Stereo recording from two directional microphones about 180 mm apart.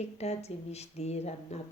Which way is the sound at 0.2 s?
35° left (ahead or behind).